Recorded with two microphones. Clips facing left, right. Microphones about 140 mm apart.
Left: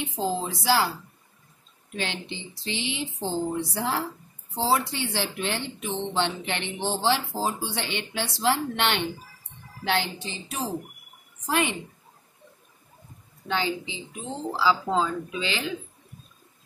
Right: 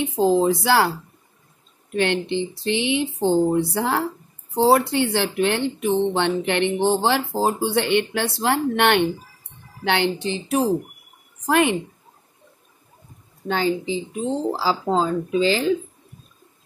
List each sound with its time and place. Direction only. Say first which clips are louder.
0.0 s speech: right 10 dB; 60° right (ahead or behind)
2.0 s a woman's voice: right 12 dB; 60° right (ahead or behind)
13.5 s speech: right 6 dB; 40° right (ahead or behind)